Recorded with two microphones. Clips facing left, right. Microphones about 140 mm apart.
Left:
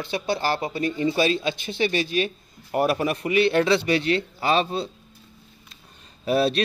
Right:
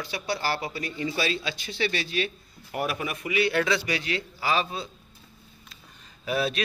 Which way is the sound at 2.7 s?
40° left (ahead or behind).